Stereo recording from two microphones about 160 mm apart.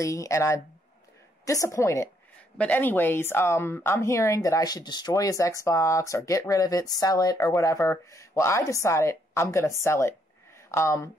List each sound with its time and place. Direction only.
0.0 s speech: 20° left (ahead or behind)